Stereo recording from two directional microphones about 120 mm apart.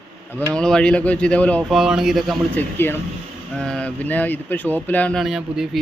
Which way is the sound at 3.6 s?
5° left (ahead or behind).